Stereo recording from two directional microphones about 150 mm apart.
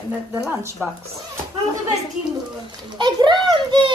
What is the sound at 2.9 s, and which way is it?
Speech, 30° right (ahead or behind).